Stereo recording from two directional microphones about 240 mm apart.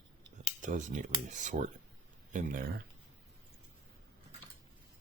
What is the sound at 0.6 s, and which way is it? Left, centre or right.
Speech, right.